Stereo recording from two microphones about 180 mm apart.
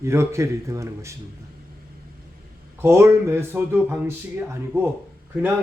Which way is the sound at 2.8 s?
15° right (ahead or behind).